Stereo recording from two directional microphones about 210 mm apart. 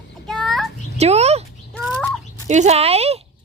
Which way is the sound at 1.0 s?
30° right (ahead or behind).